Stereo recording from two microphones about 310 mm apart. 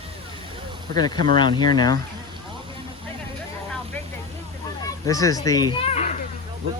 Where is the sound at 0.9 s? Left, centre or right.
Centre.